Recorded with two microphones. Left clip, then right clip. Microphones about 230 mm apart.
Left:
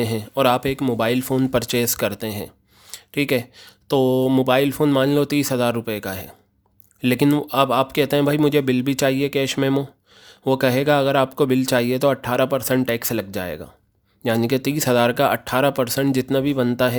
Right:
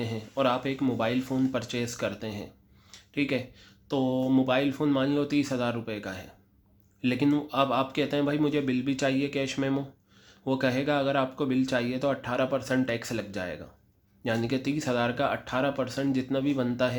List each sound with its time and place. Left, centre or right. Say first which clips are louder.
0.0 s speech: left 9 dB; left